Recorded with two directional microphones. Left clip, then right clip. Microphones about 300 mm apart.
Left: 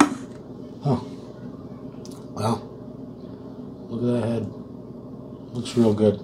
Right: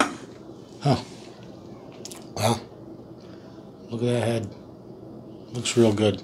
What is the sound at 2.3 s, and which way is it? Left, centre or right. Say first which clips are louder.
Throat clearing: right 2 dB; right.